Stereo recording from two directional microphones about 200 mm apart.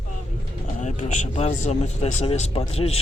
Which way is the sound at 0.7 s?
35° left (ahead or behind).